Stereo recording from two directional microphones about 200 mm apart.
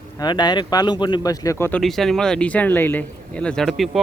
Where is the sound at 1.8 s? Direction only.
Centre (ahead or behind).